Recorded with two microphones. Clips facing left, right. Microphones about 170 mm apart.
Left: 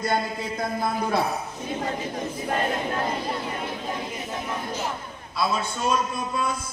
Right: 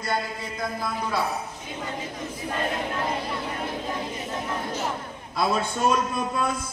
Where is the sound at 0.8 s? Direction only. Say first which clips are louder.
Left 4 dB; 50° left (ahead or behind).